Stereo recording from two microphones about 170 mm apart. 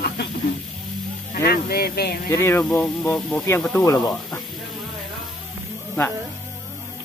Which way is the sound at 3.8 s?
20° left (ahead or behind).